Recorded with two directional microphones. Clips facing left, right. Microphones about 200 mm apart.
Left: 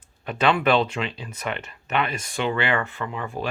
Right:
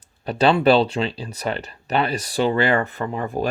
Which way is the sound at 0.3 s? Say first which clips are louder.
Right 5 dB; 35° right (ahead or behind).